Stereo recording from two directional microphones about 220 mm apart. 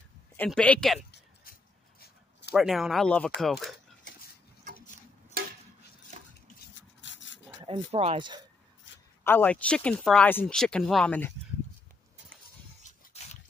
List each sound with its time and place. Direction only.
0.4 s speech: 5° left (ahead or behind)
1.1 s a sound: 45° left (ahead or behind)
2.5 s speech: centre (ahead or behind)
5.4 s stir: 45° right (ahead or behind)
6.7 s rub: 55° left (ahead or behind)
7.6 s speech: 25° right (ahead or behind)
9.2 s speech: 10° left (ahead or behind)
13.2 s a sound: 30° left (ahead or behind)